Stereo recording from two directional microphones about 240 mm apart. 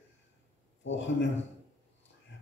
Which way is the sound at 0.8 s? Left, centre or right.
Left.